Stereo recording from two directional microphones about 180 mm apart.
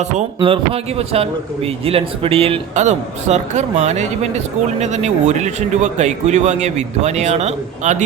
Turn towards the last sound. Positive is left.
turn(degrees=-40)  # may be behind; listen again after turning